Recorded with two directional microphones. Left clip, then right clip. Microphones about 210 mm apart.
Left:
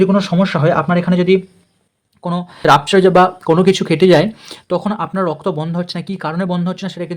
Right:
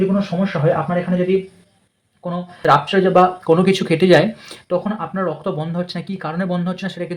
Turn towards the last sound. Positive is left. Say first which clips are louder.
# left 2 dB
turn(degrees=20)  # may be behind; listen again after turning